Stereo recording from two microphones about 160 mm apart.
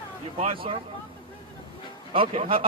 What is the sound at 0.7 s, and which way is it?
Speech, 40° right (ahead or behind).